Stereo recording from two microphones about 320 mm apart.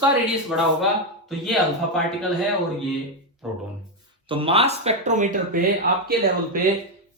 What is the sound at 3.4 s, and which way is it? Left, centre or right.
Speech, centre.